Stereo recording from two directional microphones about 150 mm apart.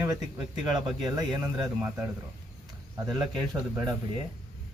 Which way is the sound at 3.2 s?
30° right (ahead or behind).